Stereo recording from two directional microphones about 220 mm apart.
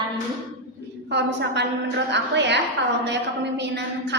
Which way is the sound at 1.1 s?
50° right (ahead or behind).